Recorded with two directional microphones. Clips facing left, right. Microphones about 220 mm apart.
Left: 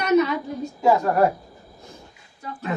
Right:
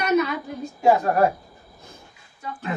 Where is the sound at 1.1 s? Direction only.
30° left (ahead or behind).